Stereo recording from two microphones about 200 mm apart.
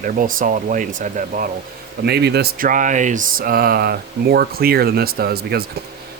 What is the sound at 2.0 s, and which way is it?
Speech, 55° right (ahead or behind).